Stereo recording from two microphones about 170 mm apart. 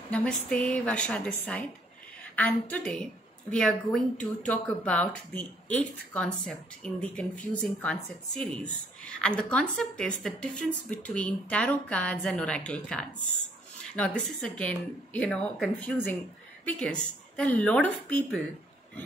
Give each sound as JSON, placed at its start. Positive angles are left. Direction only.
{"t": 0.1, "sound": "a woman's voice", "side_deg": 5}